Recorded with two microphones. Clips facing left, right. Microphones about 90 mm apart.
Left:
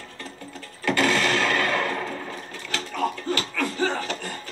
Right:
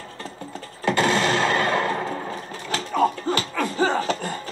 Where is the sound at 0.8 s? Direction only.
30° right (ahead or behind).